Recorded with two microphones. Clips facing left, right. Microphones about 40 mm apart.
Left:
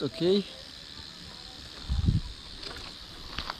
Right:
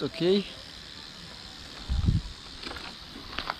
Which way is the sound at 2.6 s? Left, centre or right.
Right.